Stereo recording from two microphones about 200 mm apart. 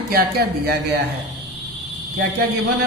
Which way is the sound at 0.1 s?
50° right (ahead or behind).